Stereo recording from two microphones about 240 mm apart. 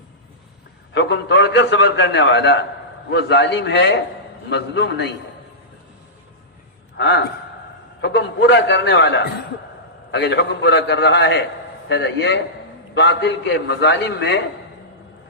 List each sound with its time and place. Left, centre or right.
0.9 s a man's voice: left
6.9 s a man's voice: left